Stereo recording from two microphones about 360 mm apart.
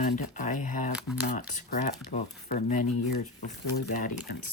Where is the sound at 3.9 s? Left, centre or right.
Left.